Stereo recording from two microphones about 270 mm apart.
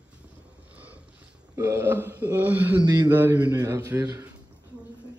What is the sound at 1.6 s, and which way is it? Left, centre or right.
Speech, centre.